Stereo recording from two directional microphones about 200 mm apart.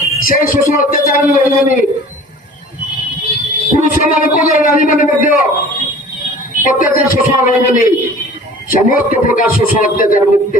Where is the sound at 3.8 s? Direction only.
45° left (ahead or behind).